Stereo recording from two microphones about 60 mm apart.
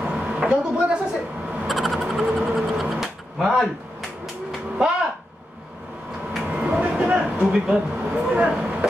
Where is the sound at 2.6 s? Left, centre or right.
Centre.